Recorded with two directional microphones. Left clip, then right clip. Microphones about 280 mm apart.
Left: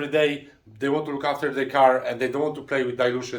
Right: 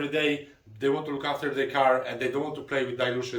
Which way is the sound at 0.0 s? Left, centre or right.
Centre.